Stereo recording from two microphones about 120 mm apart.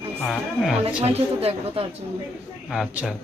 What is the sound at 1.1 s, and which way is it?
Speech, 55° right (ahead or behind).